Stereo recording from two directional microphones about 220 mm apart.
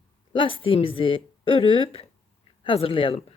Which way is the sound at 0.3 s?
25° left (ahead or behind).